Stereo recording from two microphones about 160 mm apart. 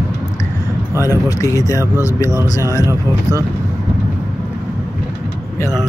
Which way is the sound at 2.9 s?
15° right (ahead or behind).